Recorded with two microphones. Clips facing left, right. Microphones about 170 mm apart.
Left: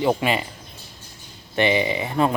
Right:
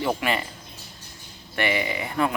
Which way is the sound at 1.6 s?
25° left (ahead or behind).